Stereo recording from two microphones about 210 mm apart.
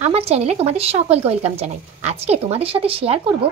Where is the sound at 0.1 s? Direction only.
30° right (ahead or behind).